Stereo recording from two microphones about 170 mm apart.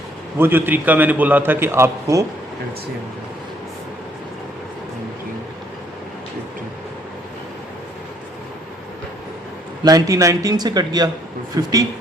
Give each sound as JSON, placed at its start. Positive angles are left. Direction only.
{"t": 0.3, "sound": "a man's voice", "side_deg": -10}
{"t": 9.8, "sound": "speech", "side_deg": -20}